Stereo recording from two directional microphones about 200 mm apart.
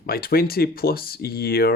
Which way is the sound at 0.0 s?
50° left (ahead or behind).